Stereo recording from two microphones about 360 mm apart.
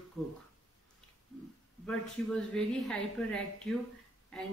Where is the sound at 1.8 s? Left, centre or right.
Centre.